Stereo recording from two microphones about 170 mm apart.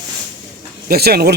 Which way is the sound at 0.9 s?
65° right (ahead or behind).